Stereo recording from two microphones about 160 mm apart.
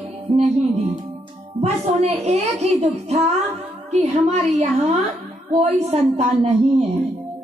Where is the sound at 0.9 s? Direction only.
30° right (ahead or behind).